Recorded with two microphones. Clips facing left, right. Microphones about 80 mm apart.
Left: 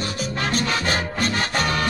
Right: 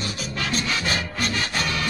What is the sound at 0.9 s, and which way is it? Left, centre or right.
Music, left.